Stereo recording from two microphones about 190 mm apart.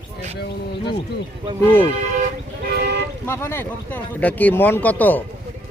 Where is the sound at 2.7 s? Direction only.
60° right (ahead or behind).